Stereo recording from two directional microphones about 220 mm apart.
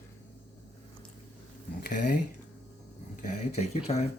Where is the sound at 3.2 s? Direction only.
30° left (ahead or behind).